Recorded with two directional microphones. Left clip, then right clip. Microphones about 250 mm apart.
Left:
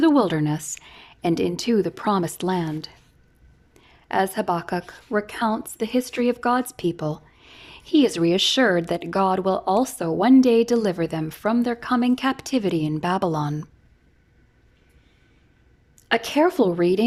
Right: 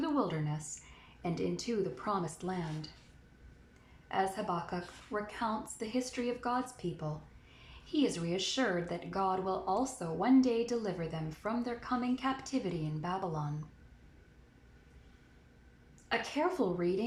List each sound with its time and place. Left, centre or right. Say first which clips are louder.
0.0 s speech: left 15 dB; left
4.1 s speech: left 11 dB; left
16.0 s speech: left 13 dB; left